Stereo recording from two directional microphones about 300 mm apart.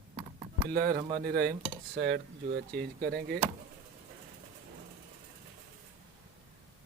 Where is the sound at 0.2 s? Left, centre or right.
Right.